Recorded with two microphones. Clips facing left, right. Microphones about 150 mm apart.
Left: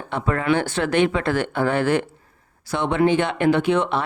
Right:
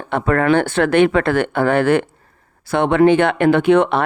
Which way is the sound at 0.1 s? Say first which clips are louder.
Right 6 dB; 60° right (ahead or behind).